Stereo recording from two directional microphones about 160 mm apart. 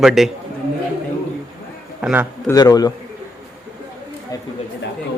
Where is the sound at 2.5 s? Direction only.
25° left (ahead or behind).